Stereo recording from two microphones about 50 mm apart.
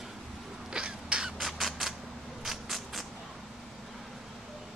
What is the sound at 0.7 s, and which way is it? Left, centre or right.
Crow, centre.